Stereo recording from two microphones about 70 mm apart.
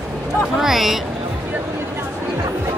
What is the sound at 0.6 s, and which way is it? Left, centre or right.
Speech, centre.